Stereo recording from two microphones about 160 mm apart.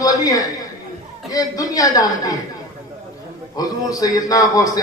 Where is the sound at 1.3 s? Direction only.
20° left (ahead or behind).